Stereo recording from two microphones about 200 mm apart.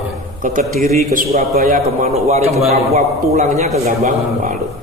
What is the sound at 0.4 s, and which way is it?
A man's voice, 40° right (ahead or behind).